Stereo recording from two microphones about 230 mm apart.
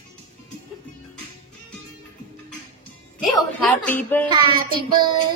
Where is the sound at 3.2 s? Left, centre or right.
Centre.